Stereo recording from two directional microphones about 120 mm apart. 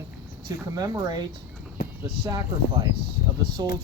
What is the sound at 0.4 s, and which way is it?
Speech, 30° right (ahead or behind).